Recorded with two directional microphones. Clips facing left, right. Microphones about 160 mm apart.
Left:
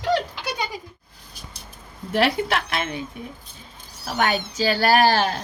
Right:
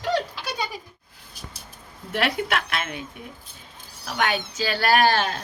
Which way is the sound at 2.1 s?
35° left (ahead or behind).